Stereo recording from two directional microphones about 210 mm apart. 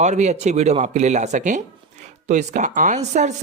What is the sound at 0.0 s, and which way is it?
Speech, 35° right (ahead or behind).